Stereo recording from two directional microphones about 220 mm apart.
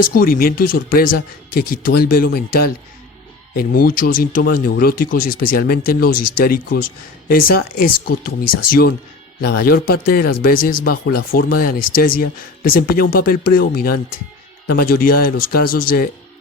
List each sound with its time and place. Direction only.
0.1 s speech: 40° left (ahead or behind)